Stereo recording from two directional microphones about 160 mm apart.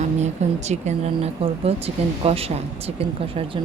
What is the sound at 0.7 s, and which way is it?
Speech, 45° right (ahead or behind).